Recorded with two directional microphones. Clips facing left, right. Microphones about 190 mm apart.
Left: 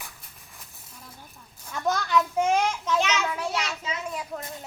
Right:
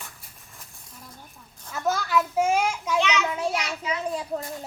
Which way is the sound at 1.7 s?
5° right (ahead or behind).